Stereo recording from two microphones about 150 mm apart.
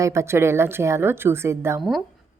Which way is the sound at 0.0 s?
20° right (ahead or behind).